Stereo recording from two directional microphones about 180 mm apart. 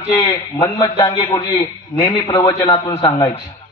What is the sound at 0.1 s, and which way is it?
A man's voice, 25° left (ahead or behind).